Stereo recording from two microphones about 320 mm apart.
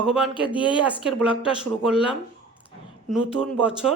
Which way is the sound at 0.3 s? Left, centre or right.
Centre.